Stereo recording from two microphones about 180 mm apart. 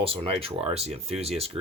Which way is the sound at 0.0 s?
30° right (ahead or behind).